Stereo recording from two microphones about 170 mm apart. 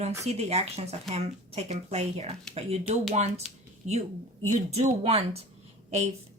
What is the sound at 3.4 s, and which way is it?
Speech, centre (ahead or behind).